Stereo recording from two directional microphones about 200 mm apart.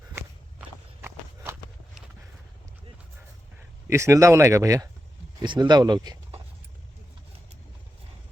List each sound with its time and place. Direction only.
0.1 s walk: 10° right (ahead or behind)
3.8 s speech: 15° right (ahead or behind)